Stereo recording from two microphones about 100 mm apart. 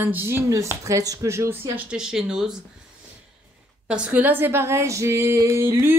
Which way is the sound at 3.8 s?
10° right (ahead or behind).